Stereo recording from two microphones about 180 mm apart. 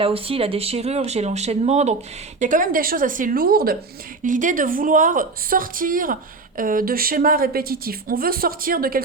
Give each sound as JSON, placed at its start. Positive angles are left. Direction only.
{"t": 0.0, "sound": "speech", "side_deg": -30}
{"t": 4.2, "sound": "speech", "side_deg": -45}